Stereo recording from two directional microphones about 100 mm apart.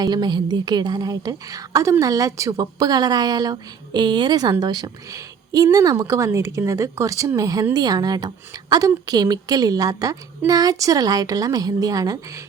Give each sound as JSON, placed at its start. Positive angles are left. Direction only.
{"t": 0.0, "sound": "a woman's voice", "side_deg": -45}